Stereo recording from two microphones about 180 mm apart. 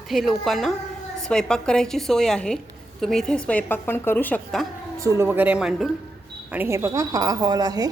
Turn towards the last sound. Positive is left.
turn(degrees=-20)  # may be behind; listen again after turning